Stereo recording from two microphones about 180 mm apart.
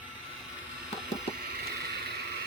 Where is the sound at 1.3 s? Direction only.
60° right (ahead or behind).